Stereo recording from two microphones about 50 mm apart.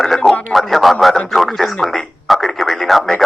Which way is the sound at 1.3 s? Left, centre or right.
Centre.